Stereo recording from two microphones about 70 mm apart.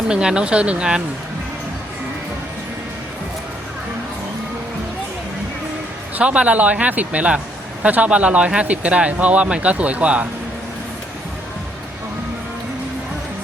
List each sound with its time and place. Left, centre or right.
0.1 s speech: centre
6.1 s speech: centre